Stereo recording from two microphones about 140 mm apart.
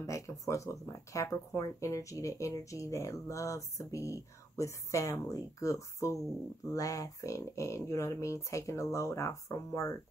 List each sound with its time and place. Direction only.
0.0 s speech: 20° left (ahead or behind)